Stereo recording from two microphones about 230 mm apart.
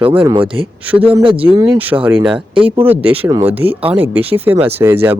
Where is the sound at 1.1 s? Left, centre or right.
Right.